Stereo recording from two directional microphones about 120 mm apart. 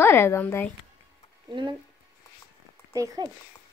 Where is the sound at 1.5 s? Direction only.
40° right (ahead or behind).